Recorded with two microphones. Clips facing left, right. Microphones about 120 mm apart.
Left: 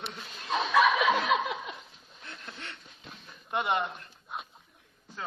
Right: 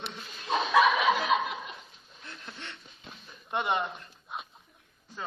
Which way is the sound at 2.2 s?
Centre (ahead or behind).